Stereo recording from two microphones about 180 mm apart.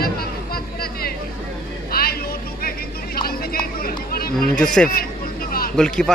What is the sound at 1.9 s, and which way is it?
Vehicle, 55° left (ahead or behind).